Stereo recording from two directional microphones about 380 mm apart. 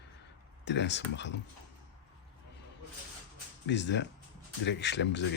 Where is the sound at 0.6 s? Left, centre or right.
Left.